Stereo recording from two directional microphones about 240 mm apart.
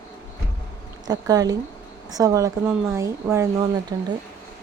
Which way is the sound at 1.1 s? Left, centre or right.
Centre.